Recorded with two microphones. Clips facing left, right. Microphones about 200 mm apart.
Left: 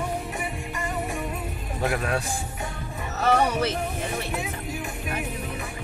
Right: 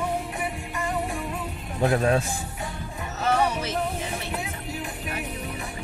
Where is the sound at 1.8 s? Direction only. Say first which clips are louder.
Right 5 dB; 30° right (ahead or behind).